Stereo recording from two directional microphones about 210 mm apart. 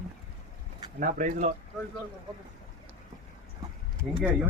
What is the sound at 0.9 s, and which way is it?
Speech, 40° right (ahead or behind).